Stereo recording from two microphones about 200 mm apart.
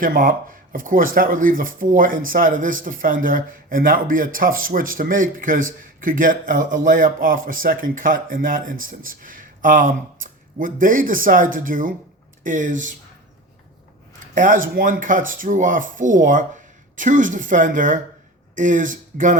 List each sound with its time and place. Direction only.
0.0 s speech: 45° right (ahead or behind)
14.3 s speech: 40° right (ahead or behind)